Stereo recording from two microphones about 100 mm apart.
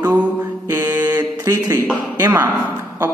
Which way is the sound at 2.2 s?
20° right (ahead or behind).